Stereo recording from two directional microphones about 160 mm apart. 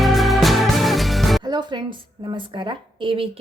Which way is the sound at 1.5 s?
30° right (ahead or behind).